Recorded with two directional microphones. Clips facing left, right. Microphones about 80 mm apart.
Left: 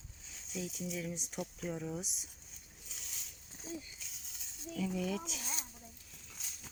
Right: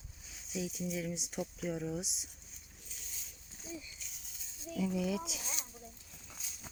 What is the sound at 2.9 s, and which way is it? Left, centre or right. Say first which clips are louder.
Boat: left 2 dB; left.